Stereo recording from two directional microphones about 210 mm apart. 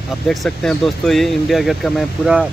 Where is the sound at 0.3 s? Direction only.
Centre (ahead or behind).